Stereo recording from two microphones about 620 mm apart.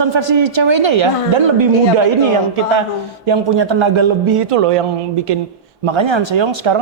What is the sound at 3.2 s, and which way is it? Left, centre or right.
A woman's voice, right.